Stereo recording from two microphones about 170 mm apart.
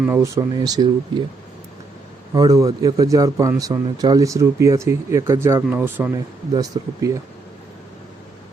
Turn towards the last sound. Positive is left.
turn(degrees=-20)  # may be behind; listen again after turning